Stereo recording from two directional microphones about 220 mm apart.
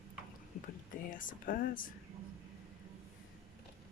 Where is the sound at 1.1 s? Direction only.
35° left (ahead or behind).